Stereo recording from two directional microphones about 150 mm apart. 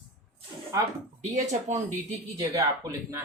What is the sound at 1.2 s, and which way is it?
Speech, 50° right (ahead or behind).